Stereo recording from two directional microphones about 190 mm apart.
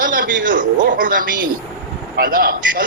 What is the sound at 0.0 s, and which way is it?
A man's voice, 45° right (ahead or behind).